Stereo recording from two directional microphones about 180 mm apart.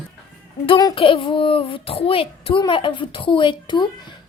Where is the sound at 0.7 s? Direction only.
25° left (ahead or behind).